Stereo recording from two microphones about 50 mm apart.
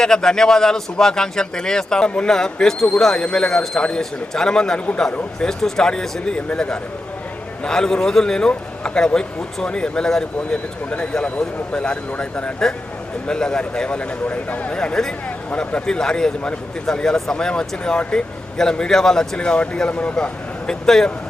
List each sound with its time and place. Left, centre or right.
0.0 s speech: centre
14.5 s speech: left
14.8 s speech: centre
19.9 s speech: left
20.7 s speech: centre